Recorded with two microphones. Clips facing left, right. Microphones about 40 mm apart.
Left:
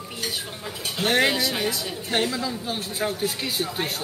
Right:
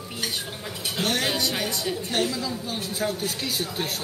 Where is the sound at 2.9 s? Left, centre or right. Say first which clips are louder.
Left 1 dB; centre.